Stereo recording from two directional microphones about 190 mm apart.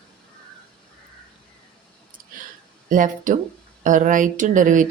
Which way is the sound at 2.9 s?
45° right (ahead or behind).